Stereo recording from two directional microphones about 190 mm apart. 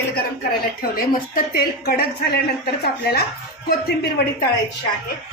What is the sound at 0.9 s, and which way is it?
Speech, 50° left (ahead or behind).